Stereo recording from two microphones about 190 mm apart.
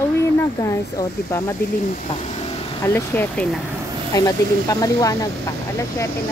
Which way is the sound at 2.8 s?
15° left (ahead or behind).